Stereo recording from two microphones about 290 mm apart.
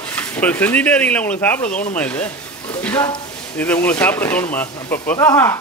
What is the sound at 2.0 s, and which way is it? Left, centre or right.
Speech, centre.